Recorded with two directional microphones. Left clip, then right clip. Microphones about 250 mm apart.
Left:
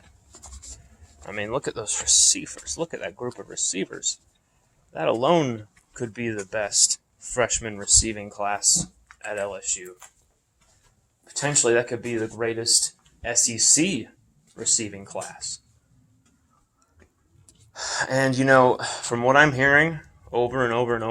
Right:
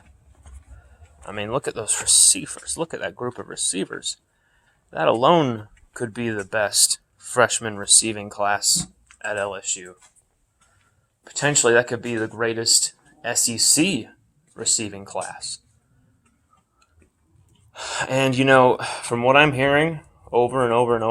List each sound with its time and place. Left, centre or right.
1.2 s speech: centre
11.2 s speech: centre
17.7 s speech: centre